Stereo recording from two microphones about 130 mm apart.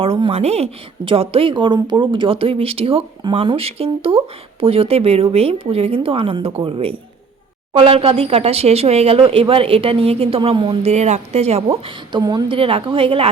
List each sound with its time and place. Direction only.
0.0 s a woman's voice: 45° right (ahead or behind)
10.8 s speech: 60° right (ahead or behind)
12.1 s a woman's voice: 35° right (ahead or behind)